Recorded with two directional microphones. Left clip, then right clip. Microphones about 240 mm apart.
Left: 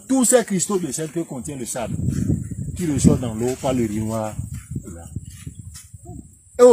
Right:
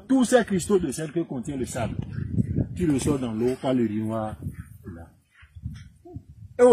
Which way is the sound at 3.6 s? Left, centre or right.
Left.